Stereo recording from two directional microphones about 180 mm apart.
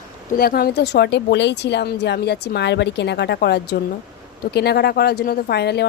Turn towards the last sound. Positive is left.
turn(degrees=65)  # may be behind; listen again after turning